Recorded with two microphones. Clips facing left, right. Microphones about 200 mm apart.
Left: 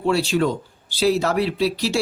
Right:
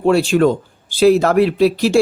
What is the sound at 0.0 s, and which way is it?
Speech, 50° right (ahead or behind).